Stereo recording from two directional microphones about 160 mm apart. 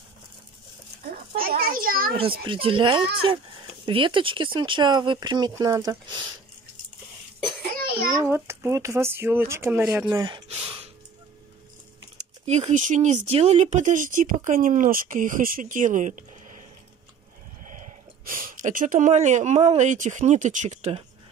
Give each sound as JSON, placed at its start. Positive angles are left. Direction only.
{"t": 1.3, "sound": "a sound", "side_deg": -65}
{"t": 2.4, "sound": "speech", "side_deg": -30}
{"t": 8.2, "sound": "speech", "side_deg": -15}
{"t": 10.1, "sound": "speech", "side_deg": -30}
{"t": 10.6, "sound": "gasp", "side_deg": -35}
{"t": 12.2, "sound": "speech", "side_deg": -45}
{"t": 17.6, "sound": "speech", "side_deg": -55}